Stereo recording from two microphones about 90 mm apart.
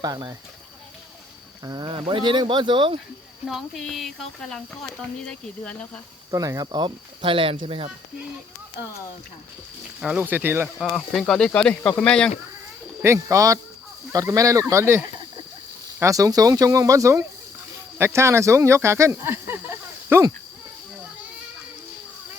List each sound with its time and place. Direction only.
0.0 s speech: 50° right (ahead or behind)
1.6 s speech: 45° right (ahead or behind)
1.9 s speech: 65° right (ahead or behind)
3.8 s speech: 5° left (ahead or behind)
6.3 s speech: 40° right (ahead or behind)
6.7 s speech: 60° right (ahead or behind); by 7.9 s 80° right
10.0 s speech: 5° right (ahead or behind)
10.2 s speech: 20° right (ahead or behind)
10.8 s speech: centre (ahead or behind)
13.1 s speech: 40° right (ahead or behind)